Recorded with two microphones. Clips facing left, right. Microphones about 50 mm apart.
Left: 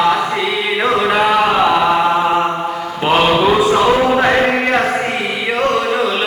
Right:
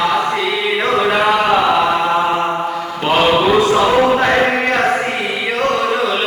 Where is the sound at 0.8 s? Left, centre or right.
Centre.